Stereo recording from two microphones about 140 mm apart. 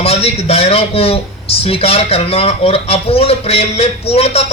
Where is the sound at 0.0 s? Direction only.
45° left (ahead or behind).